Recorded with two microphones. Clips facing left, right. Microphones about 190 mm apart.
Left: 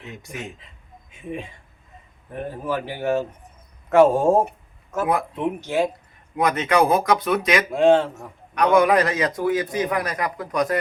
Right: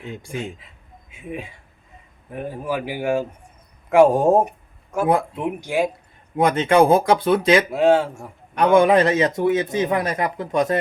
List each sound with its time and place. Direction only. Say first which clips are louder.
0.0 s a man's voice: right 5 dB; 30° right (ahead or behind)
1.1 s a man's voice: even; 5° right (ahead or behind)
6.3 s a man's voice: right 4 dB; 30° right (ahead or behind)
7.7 s speech: even; 5° right (ahead or behind)
8.5 s a man's voice: right 2 dB; 25° right (ahead or behind)